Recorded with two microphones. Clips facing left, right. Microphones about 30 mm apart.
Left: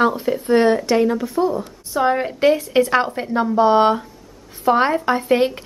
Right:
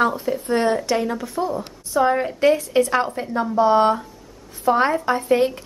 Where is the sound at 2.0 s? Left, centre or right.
Centre.